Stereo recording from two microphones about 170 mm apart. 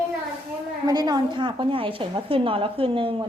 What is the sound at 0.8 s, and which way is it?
A woman's voice, 25° right (ahead or behind).